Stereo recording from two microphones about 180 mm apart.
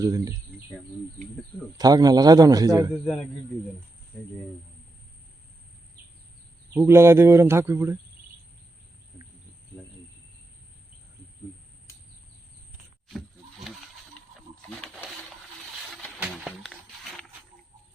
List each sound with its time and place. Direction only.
0.0 s a man's voice: 20° right (ahead or behind)
1.8 s a man's voice: 20° right (ahead or behind)
2.9 s a man's voice: 5° left (ahead or behind)
6.7 s speech: 15° right (ahead or behind)
13.1 s wild animals: centre (ahead or behind)
16.2 s a sound: 5° right (ahead or behind)